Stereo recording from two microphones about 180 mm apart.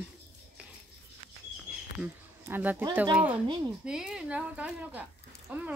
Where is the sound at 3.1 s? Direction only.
5° right (ahead or behind).